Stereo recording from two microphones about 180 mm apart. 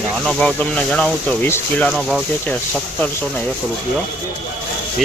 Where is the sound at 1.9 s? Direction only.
Centre (ahead or behind).